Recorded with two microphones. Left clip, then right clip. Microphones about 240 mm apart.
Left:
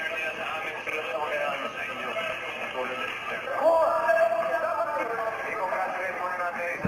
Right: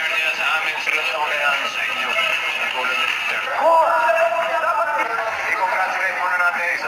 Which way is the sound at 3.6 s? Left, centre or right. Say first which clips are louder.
Right 7 dB; right.